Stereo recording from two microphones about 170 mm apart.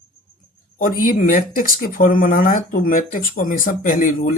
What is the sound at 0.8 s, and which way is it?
Speech, 55° left (ahead or behind).